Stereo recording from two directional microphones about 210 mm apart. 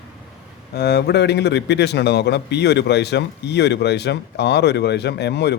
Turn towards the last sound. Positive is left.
turn(degrees=50)  # may be behind; listen again after turning